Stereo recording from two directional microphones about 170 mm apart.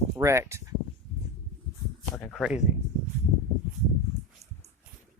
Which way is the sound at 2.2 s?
10° left (ahead or behind).